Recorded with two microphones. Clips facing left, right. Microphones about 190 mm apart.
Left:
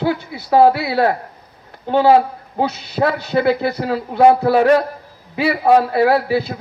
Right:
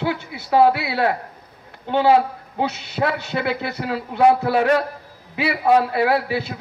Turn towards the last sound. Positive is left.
turn(degrees=40)  # may be behind; listen again after turning